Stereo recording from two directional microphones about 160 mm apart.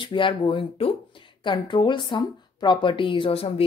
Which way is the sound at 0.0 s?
30° left (ahead or behind).